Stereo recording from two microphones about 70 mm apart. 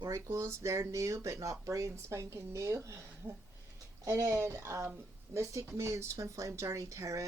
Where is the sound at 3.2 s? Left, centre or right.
Right.